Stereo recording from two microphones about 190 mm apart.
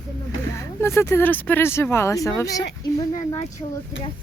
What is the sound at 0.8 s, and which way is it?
Speech, 15° left (ahead or behind).